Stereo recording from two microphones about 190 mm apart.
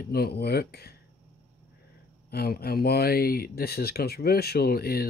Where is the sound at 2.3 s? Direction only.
55° left (ahead or behind).